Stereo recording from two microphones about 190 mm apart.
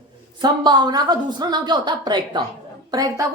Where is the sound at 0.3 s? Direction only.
20° right (ahead or behind).